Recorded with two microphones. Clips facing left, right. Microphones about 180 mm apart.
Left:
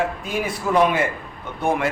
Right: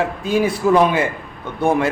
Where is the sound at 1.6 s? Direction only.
30° right (ahead or behind).